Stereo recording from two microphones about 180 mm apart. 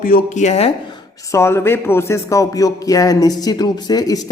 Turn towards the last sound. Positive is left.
turn(degrees=20)  # may be behind; listen again after turning